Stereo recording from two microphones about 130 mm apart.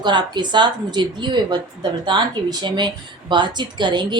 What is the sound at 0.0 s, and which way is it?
Speech, 35° right (ahead or behind).